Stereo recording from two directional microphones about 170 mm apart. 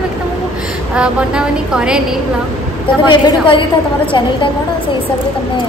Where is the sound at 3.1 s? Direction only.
30° left (ahead or behind).